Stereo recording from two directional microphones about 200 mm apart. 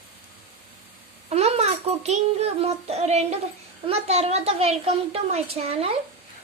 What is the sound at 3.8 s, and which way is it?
A woman's voice, 30° right (ahead or behind).